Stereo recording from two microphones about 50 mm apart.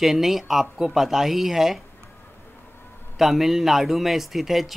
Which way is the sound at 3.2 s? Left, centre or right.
Centre.